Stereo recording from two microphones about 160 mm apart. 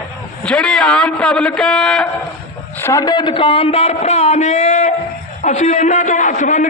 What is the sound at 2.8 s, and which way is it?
A man's voice, 20° left (ahead or behind).